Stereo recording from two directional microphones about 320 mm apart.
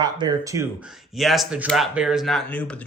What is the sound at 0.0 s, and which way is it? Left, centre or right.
Speech, centre.